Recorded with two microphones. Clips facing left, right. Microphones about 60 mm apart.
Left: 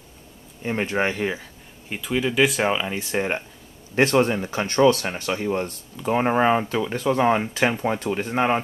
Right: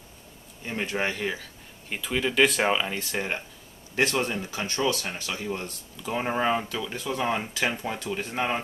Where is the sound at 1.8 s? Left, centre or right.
Centre.